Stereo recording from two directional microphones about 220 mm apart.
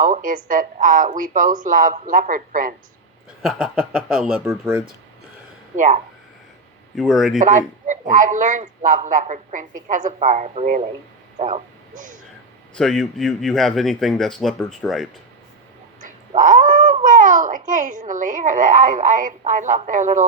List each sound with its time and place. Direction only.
0.0 s a man's voice: 35° right (ahead or behind)
3.4 s speech: 5° right (ahead or behind)
5.7 s speech: 35° right (ahead or behind)
6.9 s speech: centre (ahead or behind)
7.3 s a man's voice: 35° right (ahead or behind)
12.7 s speech: centre (ahead or behind)
16.0 s cat: 35° right (ahead or behind)
17.0 s a man's voice: 35° right (ahead or behind)